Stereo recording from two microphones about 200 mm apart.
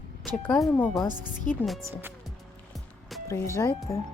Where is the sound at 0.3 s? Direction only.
5° left (ahead or behind).